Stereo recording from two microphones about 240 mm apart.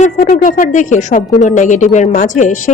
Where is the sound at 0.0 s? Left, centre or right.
Left.